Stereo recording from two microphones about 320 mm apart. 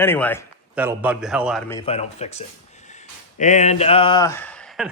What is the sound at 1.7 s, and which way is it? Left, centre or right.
A man's voice, centre.